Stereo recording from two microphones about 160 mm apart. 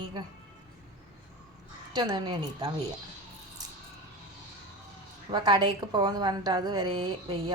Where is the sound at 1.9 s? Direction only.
30° right (ahead or behind).